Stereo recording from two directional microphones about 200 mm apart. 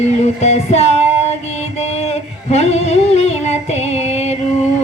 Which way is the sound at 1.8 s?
30° left (ahead or behind).